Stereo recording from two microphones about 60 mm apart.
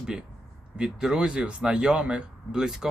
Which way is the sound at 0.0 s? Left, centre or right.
Centre.